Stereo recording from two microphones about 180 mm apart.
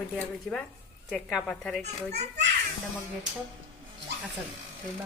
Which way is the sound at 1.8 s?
40° right (ahead or behind).